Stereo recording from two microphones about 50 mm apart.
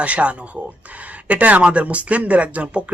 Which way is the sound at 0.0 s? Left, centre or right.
Right.